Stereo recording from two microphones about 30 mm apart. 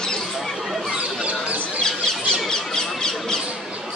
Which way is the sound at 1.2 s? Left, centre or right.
Right.